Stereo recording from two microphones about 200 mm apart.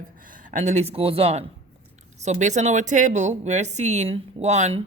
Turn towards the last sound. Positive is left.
turn(degrees=-35)  # may be behind; listen again after turning